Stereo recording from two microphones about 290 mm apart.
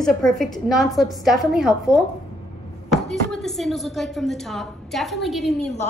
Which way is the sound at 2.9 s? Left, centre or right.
Centre.